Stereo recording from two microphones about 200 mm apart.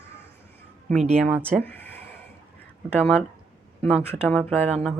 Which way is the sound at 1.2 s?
5° right (ahead or behind).